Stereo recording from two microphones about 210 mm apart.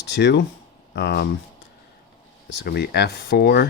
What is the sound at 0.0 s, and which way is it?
Speech, 55° left (ahead or behind).